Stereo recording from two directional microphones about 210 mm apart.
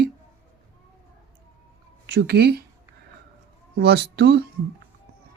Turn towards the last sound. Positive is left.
turn(degrees=-55)  # may be behind; listen again after turning